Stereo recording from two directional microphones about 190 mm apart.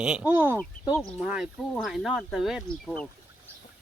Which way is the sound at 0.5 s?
5° left (ahead or behind).